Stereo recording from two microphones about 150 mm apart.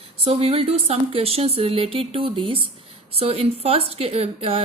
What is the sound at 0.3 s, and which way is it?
A woman's voice, 40° right (ahead or behind).